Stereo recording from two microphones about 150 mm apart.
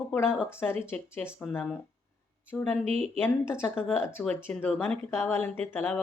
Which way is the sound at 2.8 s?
45° right (ahead or behind).